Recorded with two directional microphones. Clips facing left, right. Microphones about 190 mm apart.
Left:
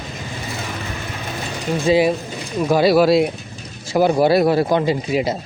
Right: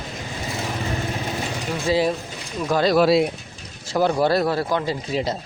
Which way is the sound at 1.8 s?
15° left (ahead or behind).